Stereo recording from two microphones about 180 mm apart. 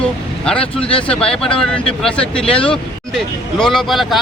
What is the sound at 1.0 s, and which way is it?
Speech, 5° left (ahead or behind).